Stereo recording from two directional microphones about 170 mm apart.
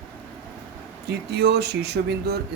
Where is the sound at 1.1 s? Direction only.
75° right (ahead or behind).